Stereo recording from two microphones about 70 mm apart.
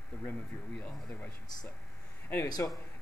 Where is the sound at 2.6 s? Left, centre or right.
Left.